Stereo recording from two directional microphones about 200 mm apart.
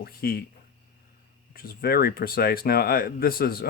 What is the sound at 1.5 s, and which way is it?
Speech, 50° left (ahead or behind).